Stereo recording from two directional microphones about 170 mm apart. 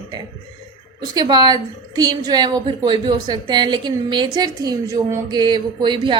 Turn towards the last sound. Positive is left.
turn(degrees=-30)  # may be behind; listen again after turning